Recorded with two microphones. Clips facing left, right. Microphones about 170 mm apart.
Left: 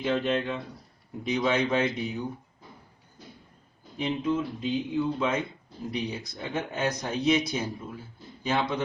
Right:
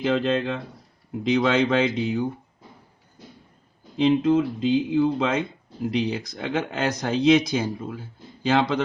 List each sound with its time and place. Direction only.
0.0 s speech: 90° right
3.9 s speech: 90° right